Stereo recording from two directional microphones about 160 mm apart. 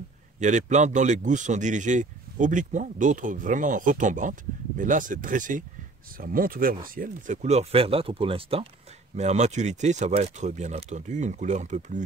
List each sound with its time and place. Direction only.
0.4 s speech: 50° right (ahead or behind)
7.4 s speech: 40° right (ahead or behind)